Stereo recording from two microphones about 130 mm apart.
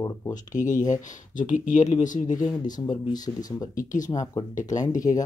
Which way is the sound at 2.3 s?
30° left (ahead or behind).